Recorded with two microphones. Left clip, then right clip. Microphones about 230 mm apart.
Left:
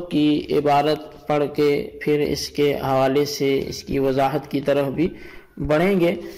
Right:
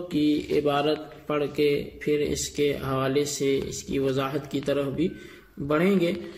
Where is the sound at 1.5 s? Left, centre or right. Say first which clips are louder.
Left 3 dB; left.